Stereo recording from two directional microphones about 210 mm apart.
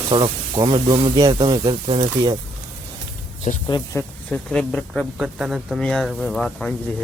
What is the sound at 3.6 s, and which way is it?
Speech, 15° left (ahead or behind).